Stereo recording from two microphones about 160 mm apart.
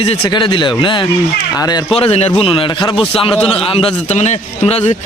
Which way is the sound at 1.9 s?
40° left (ahead or behind).